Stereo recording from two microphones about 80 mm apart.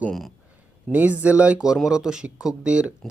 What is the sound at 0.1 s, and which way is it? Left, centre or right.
Speech, centre.